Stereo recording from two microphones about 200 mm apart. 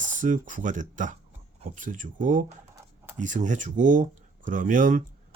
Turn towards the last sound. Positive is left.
turn(degrees=-40)  # may be behind; listen again after turning